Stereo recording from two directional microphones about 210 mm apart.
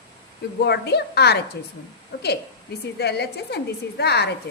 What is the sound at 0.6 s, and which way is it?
A woman's voice, 50° left (ahead or behind).